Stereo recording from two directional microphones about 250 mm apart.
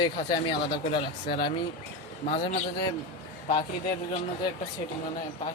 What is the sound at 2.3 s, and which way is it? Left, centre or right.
Speech, left.